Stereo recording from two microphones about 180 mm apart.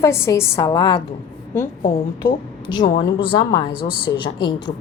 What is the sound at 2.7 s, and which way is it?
Speech, 25° left (ahead or behind).